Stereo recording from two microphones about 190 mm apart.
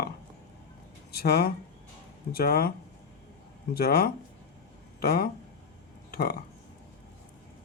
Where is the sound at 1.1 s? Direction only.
55° left (ahead or behind).